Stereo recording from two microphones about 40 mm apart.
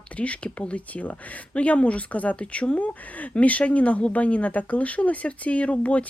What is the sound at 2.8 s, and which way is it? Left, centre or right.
Speech, left.